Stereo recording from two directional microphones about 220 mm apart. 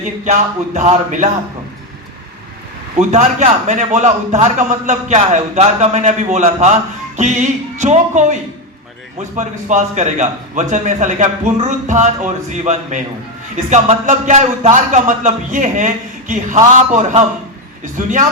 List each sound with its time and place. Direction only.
0.3 s a man's voice: 30° right (ahead or behind)
3.1 s a man's voice: 30° right (ahead or behind)
9.4 s a man's voice: 35° right (ahead or behind)